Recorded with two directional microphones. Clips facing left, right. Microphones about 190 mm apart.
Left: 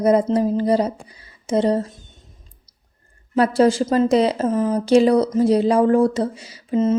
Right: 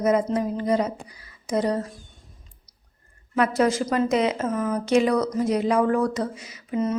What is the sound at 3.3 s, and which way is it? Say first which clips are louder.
Speech: left 5 dB; 30° left (ahead or behind).